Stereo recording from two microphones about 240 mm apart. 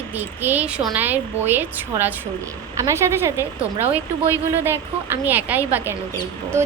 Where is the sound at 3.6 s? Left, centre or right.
Centre.